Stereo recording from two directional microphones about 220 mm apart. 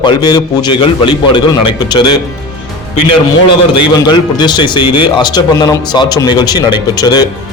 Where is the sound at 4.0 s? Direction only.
20° left (ahead or behind).